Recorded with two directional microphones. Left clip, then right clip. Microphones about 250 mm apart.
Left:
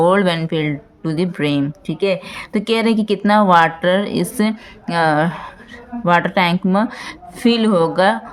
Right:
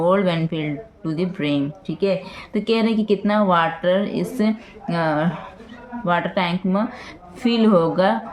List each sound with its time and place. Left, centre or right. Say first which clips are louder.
0.0 s speech: left 4 dB; left